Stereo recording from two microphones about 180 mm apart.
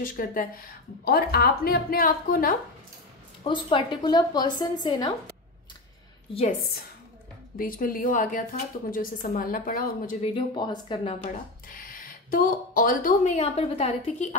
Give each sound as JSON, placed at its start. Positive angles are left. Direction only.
{"t": 0.0, "sound": "a woman's voice", "side_deg": 50}
{"t": 3.4, "sound": "a woman's voice", "side_deg": 30}
{"t": 7.5, "sound": "a woman's voice", "side_deg": 50}
{"t": 10.2, "sound": "a woman's voice", "side_deg": 25}
{"t": 11.7, "sound": "speech", "side_deg": 50}